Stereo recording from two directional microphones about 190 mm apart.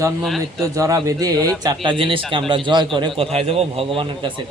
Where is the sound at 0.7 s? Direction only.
15° right (ahead or behind).